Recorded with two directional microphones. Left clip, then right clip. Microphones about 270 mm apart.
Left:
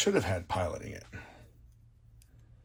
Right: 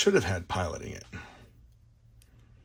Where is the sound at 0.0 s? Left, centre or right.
Centre.